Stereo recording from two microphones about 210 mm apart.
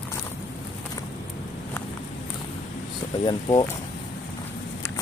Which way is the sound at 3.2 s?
20° left (ahead or behind).